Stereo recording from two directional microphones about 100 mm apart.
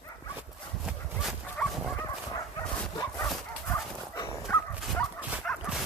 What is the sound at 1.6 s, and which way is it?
Dog, 10° left (ahead or behind).